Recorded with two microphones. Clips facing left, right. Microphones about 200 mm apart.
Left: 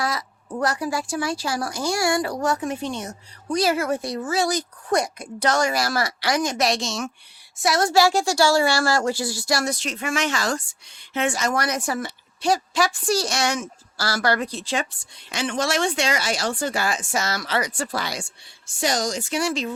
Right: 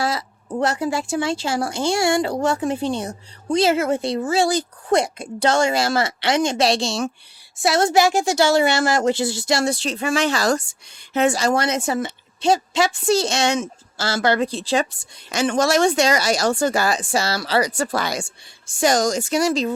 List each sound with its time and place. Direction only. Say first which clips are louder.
0.0 s speech: right 3 dB; 30° right (ahead or behind)